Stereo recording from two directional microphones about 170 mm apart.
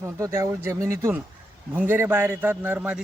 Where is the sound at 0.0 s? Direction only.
15° right (ahead or behind).